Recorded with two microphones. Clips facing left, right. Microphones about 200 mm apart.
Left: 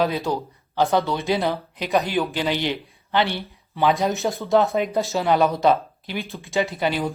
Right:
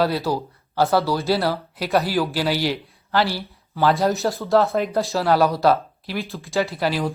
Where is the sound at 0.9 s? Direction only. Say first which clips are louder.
Right 2 dB; 5° right (ahead or behind).